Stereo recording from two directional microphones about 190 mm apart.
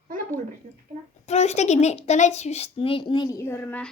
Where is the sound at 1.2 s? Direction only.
35° left (ahead or behind).